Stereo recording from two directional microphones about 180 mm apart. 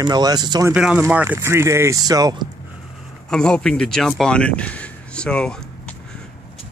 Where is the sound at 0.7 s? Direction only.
5° right (ahead or behind); by 2.5 s 20° right (ahead or behind).